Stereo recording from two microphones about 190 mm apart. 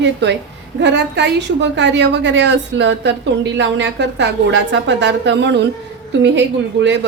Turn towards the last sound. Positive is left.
turn(degrees=-70)  # may be behind; listen again after turning